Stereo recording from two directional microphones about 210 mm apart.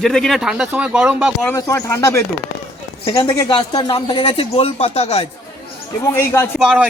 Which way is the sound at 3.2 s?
15° left (ahead or behind).